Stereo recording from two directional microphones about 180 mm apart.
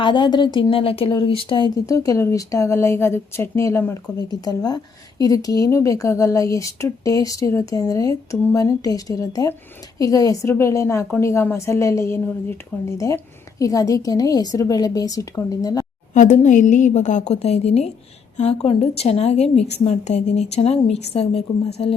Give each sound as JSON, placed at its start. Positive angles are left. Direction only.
{"t": 0.0, "sound": "a woman's voice", "side_deg": 25}
{"t": 16.1, "sound": "a woman's voice", "side_deg": 45}